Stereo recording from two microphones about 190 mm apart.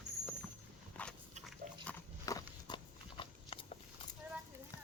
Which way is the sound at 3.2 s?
30° left (ahead or behind).